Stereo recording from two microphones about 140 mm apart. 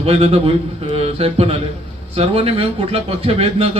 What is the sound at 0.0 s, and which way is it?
Speech, 45° right (ahead or behind).